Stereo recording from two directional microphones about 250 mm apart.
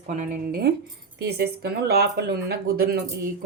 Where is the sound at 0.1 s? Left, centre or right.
Right.